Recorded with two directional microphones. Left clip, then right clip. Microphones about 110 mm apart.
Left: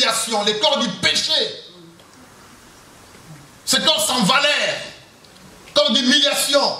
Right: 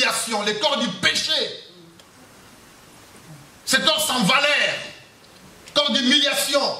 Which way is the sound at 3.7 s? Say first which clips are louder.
Left 2 dB; 15° left (ahead or behind).